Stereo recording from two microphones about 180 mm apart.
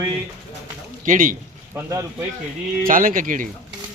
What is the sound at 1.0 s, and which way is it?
Speech, 50° right (ahead or behind).